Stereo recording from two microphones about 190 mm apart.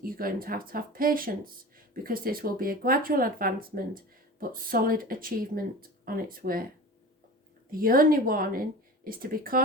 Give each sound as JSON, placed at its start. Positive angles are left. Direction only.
{"t": 0.0, "sound": "speech", "side_deg": -50}
{"t": 7.7, "sound": "speech", "side_deg": -50}